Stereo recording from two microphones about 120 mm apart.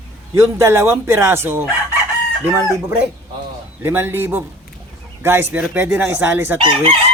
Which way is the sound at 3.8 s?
20° right (ahead or behind).